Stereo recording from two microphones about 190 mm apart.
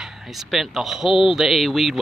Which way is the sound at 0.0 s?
Centre (ahead or behind).